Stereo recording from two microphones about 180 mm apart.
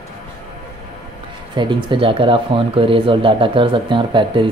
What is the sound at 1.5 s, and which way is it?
Speech, 25° right (ahead or behind).